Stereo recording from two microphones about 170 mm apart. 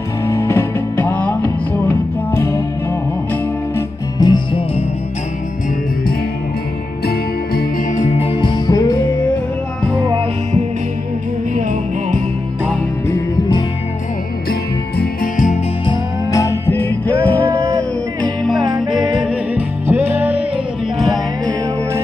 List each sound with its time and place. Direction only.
0.3 s music: 15° left (ahead or behind)
3.7 s music: 20° left (ahead or behind)
7.9 s music: 40° left (ahead or behind); by 8.9 s 25° left (ahead or behind)
14.5 s music: 55° left (ahead or behind)
15.8 s music: 20° left (ahead or behind); by 20.4 s 10° right (ahead or behind)
21.0 s music: centre (ahead or behind)